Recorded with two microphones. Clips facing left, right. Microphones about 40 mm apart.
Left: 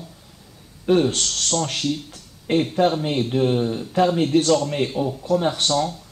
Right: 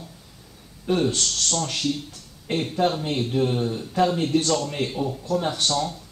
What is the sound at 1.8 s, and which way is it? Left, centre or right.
Speech, centre.